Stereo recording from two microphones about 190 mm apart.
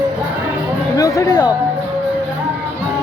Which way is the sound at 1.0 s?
20° left (ahead or behind).